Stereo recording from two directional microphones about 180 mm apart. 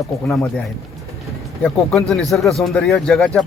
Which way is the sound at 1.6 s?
5° left (ahead or behind).